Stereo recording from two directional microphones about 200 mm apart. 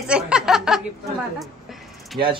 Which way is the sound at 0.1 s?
5° right (ahead or behind).